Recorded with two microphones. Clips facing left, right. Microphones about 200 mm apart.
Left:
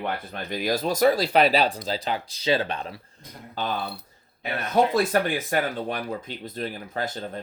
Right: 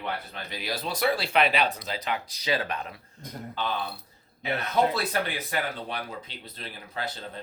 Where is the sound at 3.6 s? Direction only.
40° left (ahead or behind).